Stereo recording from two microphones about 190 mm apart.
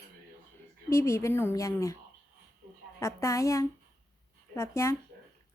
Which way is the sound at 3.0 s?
15° left (ahead or behind).